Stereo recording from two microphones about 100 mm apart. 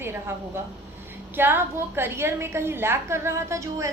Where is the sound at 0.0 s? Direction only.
25° right (ahead or behind).